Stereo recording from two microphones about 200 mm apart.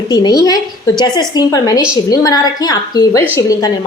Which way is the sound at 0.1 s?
20° left (ahead or behind).